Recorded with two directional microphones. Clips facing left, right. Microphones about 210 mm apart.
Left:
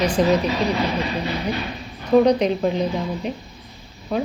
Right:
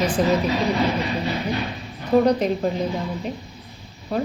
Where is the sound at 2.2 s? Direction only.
5° right (ahead or behind).